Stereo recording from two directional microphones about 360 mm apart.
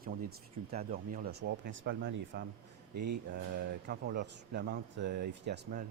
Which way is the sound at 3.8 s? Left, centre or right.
Right.